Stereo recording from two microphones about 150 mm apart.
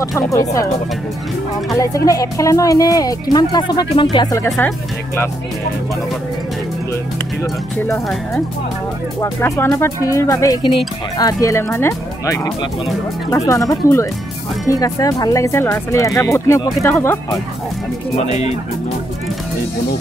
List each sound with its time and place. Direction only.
0.3 s speech: 20° left (ahead or behind)
1.8 s speech: 20° left (ahead or behind)
4.6 s speech: 15° left (ahead or behind)
9.2 s speech: 20° left (ahead or behind)